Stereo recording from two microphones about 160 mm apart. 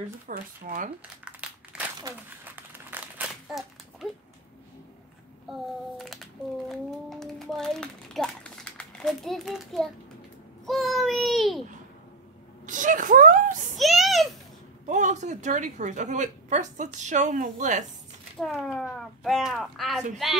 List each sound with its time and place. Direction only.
0.3 s speech: 60° right (ahead or behind)
1.2 s crumpling: 5° right (ahead or behind)
5.5 s a child's voice: centre (ahead or behind)
6.7 s a sound: centre (ahead or behind)
10.7 s a child's voice: centre (ahead or behind)
12.6 s speech: 55° right (ahead or behind)
13.7 s a child's voice: centre (ahead or behind)
14.9 s a woman's voice: 50° right (ahead or behind)
18.4 s a child's voice: 5° left (ahead or behind)